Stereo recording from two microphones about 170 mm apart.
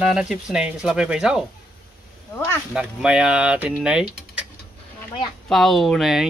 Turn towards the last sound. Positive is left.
turn(degrees=0)  # may be behind; listen again after turning